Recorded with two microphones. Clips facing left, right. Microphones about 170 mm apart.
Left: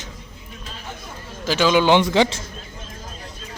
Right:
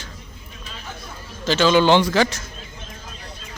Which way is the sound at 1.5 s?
10° left (ahead or behind).